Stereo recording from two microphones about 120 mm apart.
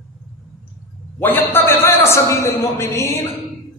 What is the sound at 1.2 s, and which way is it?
A man's voice, 15° left (ahead or behind).